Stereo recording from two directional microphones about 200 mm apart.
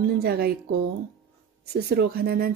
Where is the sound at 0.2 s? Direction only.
50° right (ahead or behind).